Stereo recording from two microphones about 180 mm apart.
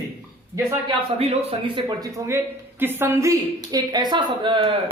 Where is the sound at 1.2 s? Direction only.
30° right (ahead or behind).